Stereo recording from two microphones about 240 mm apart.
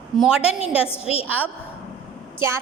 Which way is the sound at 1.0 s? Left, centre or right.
Left.